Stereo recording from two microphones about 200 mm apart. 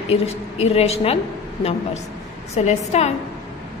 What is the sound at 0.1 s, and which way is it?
A woman's voice, 30° left (ahead or behind).